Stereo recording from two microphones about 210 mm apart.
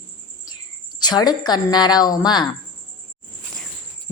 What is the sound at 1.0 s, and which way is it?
A woman's voice, 20° left (ahead or behind).